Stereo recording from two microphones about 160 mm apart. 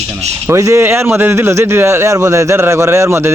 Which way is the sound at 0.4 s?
20° right (ahead or behind).